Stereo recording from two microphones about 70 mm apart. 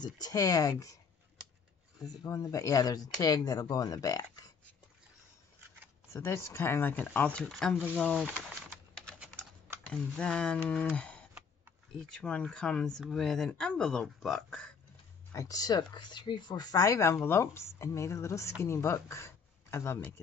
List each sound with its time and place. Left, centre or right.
0.0 s speech: left
2.0 s speech: left
6.1 s speech: left; by 7.7 s centre
9.8 s speech: centre
15.3 s speech: left
17.2 s speech: left